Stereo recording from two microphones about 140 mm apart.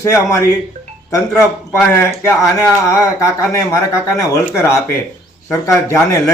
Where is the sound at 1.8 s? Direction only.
20° left (ahead or behind).